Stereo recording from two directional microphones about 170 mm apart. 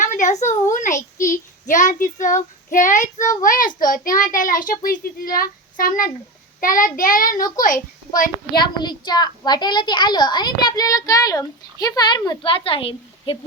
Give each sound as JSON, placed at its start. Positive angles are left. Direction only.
{"t": 0.0, "sound": "a sound", "side_deg": 45}
{"t": 0.7, "sound": "a child's voice", "side_deg": 45}
{"t": 8.5, "sound": "a child's voice", "side_deg": 25}